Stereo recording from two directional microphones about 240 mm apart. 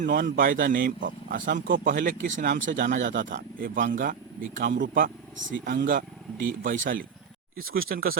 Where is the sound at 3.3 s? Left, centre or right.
Right.